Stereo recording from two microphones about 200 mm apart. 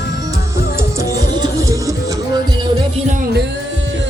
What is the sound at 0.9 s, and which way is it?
Music, 20° right (ahead or behind).